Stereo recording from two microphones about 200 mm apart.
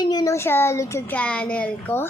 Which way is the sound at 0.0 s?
20° left (ahead or behind).